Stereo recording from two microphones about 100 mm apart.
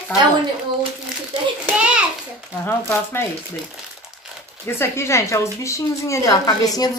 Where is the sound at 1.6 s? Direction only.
10° right (ahead or behind).